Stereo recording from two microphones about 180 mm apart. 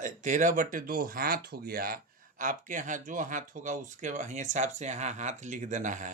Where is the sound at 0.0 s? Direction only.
45° right (ahead or behind).